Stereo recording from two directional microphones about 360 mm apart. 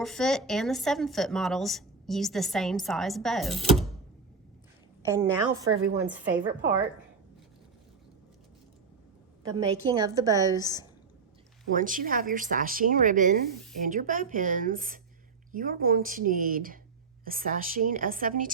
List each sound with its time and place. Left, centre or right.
0.0 s a woman's voice: centre
5.0 s a woman's voice: centre
6.3 s speech: right
9.4 s a woman's voice: centre
10.4 s a woman's voice: centre
11.7 s speech: right